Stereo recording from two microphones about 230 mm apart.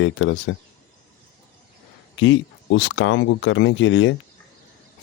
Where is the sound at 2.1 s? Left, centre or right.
Left.